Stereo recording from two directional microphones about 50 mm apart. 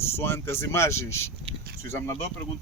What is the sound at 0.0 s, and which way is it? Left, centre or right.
Speech, left.